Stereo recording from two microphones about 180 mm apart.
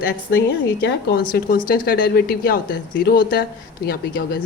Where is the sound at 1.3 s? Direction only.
55° left (ahead or behind).